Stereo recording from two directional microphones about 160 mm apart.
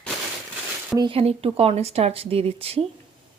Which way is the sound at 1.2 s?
40° right (ahead or behind).